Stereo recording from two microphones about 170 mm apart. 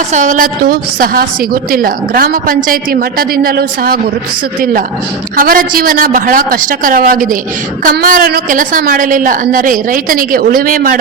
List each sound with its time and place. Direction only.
0.1 s a woman's voice: 45° right (ahead or behind)
5.4 s a woman's voice: 55° right (ahead or behind)